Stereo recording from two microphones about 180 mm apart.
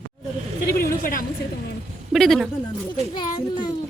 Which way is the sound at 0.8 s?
50° left (ahead or behind).